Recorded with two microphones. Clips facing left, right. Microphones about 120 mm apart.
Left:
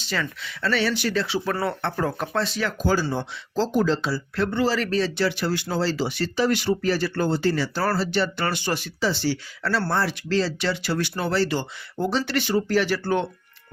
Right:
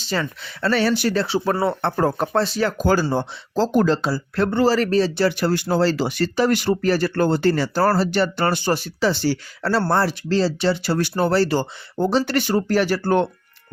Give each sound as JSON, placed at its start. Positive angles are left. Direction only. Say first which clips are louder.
{"t": 0.0, "sound": "speech", "louder": "right 4 dB", "side_deg": -35}
{"t": 2.8, "sound": "speech", "louder": "right 3 dB", "side_deg": -55}
{"t": 3.2, "sound": "speech", "louder": "right 4 dB", "side_deg": -40}
{"t": 3.7, "sound": "speech", "louder": "right 4 dB", "side_deg": -55}
{"t": 5.6, "sound": "speech", "louder": "right 5 dB", "side_deg": -60}